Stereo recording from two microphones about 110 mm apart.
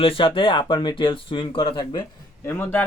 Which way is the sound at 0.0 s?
55° left (ahead or behind).